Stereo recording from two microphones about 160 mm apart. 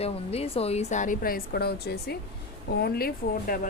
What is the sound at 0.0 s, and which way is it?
A woman's voice, 40° left (ahead or behind).